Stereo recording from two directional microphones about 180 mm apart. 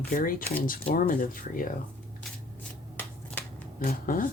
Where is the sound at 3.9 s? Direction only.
50° left (ahead or behind).